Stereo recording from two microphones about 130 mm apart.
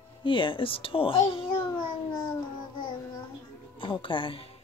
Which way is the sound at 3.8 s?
40° left (ahead or behind).